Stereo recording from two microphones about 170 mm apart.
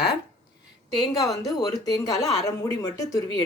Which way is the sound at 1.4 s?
25° left (ahead or behind).